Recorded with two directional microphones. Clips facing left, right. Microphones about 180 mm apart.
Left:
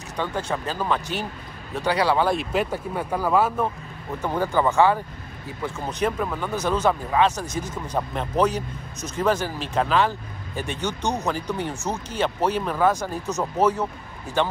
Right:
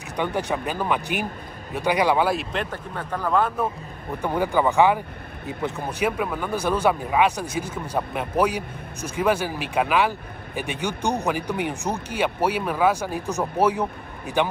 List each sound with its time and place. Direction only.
0.2 s a man's voice: 15° right (ahead or behind)
2.3 s speech: 5° left (ahead or behind)
4.2 s a man's voice: 15° right (ahead or behind)
5.9 s a man's voice: 10° right (ahead or behind)